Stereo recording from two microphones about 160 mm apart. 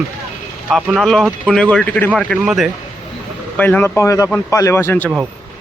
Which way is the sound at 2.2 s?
Centre (ahead or behind).